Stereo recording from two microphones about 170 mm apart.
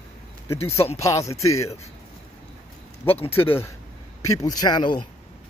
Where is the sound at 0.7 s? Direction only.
40° left (ahead or behind).